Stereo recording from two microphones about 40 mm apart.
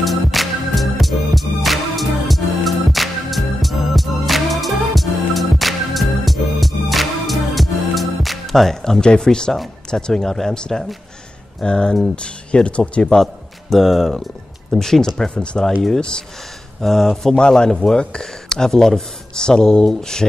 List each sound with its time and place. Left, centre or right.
0.0 s music: centre
9.0 s speech: left
13.2 s speech: centre
14.7 s speech: centre
16.8 s speech: centre